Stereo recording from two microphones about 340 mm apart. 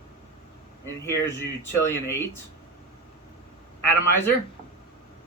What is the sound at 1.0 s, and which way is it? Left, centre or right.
Speech, centre.